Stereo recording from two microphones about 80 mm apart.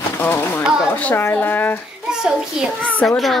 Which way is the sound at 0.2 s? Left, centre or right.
Left.